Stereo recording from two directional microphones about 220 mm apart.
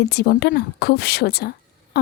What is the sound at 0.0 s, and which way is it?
Speech, 45° left (ahead or behind).